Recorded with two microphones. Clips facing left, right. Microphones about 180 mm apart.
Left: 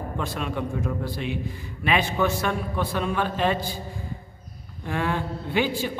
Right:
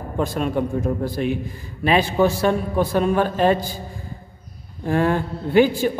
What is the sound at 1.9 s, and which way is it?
A man's voice, 35° right (ahead or behind).